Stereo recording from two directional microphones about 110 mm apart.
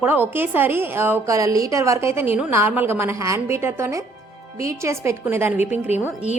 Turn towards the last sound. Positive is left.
turn(degrees=-15)  # may be behind; listen again after turning